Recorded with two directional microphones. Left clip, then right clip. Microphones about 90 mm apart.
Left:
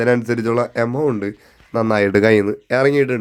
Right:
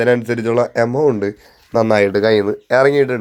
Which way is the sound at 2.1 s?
90° left.